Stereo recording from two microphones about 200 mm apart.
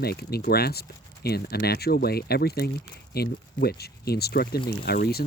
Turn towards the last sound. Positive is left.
turn(degrees=50)  # may be behind; listen again after turning